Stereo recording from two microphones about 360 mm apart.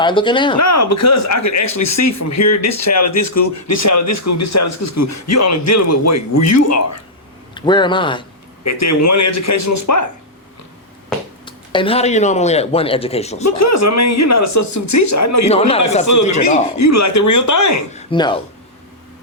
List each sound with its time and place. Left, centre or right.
0.0 s speech: centre
0.6 s a man's voice: left
7.5 s speech: centre
8.6 s a man's voice: left
11.4 s speech: centre
13.4 s a man's voice: left
15.4 s speech: centre
16.1 s a man's voice: left
17.9 s speech: centre